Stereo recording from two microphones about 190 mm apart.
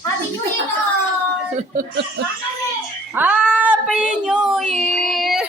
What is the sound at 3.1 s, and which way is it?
Child singing, 5° right (ahead or behind).